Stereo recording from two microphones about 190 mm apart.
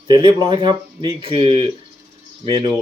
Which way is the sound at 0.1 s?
25° right (ahead or behind).